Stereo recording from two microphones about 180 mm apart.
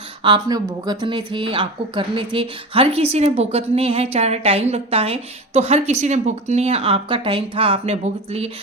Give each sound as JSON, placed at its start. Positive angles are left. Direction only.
{"t": 0.2, "sound": "a woman's voice", "side_deg": -25}